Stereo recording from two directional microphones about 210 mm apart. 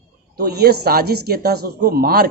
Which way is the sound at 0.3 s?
50° right (ahead or behind).